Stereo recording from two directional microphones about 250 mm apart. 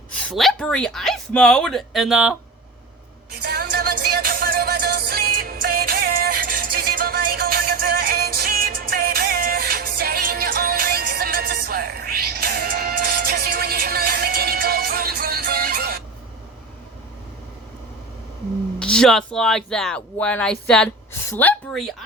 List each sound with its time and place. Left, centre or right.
0.3 s speech: centre
3.4 s music: right
18.8 s speech: centre